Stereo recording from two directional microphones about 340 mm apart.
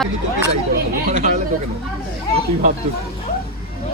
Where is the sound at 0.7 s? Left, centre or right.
Right.